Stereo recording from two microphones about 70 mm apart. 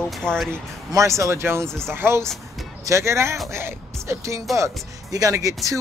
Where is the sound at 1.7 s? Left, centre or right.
Centre.